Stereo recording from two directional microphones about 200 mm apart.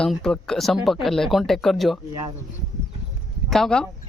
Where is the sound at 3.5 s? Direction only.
Centre (ahead or behind).